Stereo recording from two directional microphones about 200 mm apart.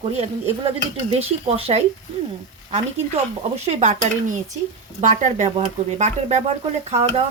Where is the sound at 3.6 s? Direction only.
30° right (ahead or behind).